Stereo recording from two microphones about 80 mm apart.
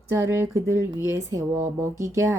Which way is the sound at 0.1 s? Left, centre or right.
Right.